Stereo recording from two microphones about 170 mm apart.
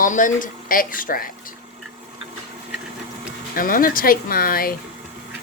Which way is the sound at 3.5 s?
55° left (ahead or behind).